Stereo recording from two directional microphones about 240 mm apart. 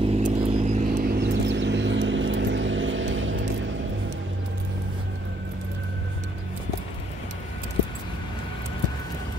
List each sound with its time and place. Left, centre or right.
0.0 s vehicle: right
1.1 s vehicle: right